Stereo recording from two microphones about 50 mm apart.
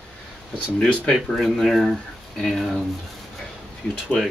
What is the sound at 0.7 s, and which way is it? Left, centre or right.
Speech, left.